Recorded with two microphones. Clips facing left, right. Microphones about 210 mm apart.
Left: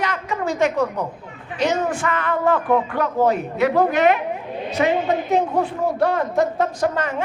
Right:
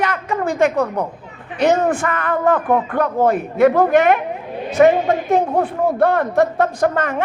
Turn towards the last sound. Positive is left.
turn(degrees=-55)  # may be behind; listen again after turning